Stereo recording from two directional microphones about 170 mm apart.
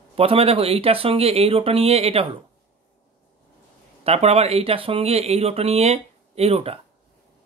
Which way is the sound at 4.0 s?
35° right (ahead or behind).